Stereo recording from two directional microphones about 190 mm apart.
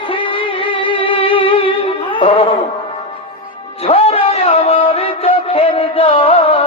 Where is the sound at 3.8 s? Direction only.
30° left (ahead or behind).